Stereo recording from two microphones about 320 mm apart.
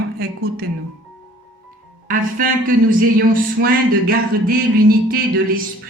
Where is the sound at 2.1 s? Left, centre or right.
Right.